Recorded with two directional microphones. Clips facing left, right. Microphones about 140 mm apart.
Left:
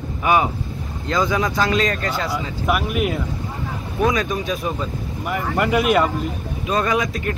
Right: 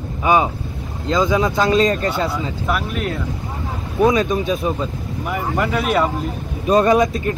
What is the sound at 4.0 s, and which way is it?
Speech, 25° right (ahead or behind).